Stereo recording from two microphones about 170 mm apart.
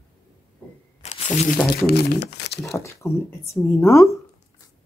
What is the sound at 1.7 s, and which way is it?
Speech, 70° left (ahead or behind).